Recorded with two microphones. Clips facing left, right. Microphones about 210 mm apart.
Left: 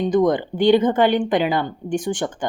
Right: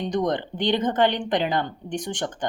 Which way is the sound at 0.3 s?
10° left (ahead or behind).